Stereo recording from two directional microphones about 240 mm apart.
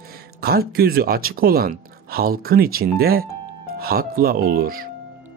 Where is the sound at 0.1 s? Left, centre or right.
Right.